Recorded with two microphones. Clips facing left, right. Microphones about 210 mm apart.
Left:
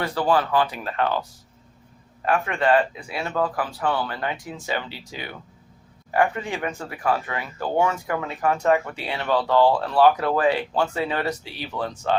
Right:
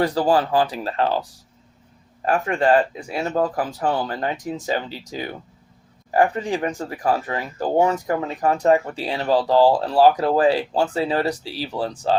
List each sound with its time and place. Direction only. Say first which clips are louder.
0.0 s speech: right 3 dB; 35° right (ahead or behind)
2.2 s speech: right 2 dB; 40° right (ahead or behind)